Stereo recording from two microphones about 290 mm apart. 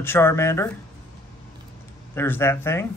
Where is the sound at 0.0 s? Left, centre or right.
Centre.